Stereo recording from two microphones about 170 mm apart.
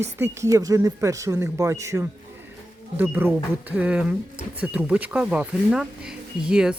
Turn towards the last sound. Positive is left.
turn(degrees=-5)  # may be behind; listen again after turning